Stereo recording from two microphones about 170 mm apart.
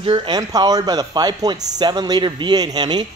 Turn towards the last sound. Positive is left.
turn(degrees=-25)  # may be behind; listen again after turning